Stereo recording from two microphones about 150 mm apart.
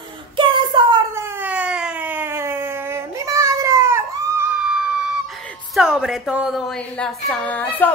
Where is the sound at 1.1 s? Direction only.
15° right (ahead or behind).